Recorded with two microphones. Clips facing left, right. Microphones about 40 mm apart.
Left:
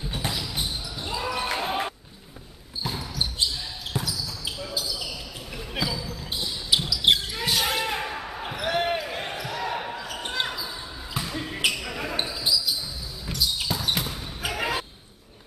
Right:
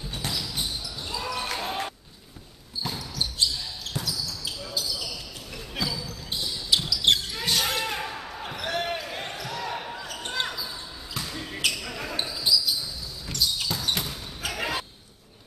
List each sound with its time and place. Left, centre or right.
0.1 s basketball bounce: centre
3.0 s basketball bounce: centre
3.9 s basketball bounce: centre